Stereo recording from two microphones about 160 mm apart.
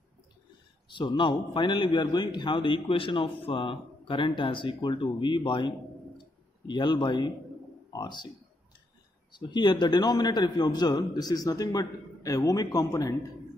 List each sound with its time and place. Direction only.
0.9 s a man's voice: 30° left (ahead or behind)
6.7 s a man's voice: 30° left (ahead or behind)
9.3 s a man's voice: 30° left (ahead or behind)